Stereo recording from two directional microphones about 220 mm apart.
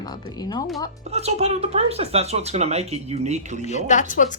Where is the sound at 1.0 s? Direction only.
30° right (ahead or behind).